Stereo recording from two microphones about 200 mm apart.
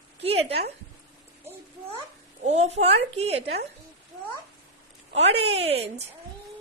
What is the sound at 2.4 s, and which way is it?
Speech, 35° right (ahead or behind).